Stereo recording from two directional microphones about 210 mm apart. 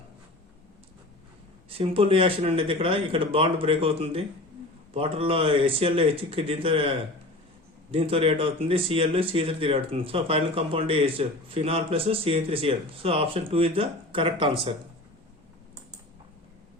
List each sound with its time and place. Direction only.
1.8 s speech: 25° right (ahead or behind)